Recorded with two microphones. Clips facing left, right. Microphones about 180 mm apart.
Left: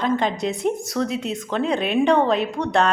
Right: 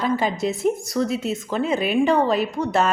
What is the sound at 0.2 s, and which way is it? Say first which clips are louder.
A woman's voice: even; 5° right (ahead or behind).